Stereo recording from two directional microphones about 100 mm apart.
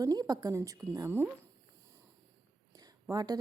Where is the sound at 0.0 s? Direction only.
40° right (ahead or behind).